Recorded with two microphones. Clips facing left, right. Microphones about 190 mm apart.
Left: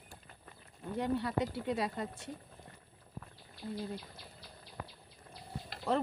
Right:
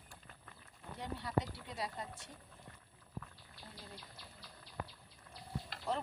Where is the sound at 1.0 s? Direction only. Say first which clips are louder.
Left 6 dB; 65° left (ahead or behind).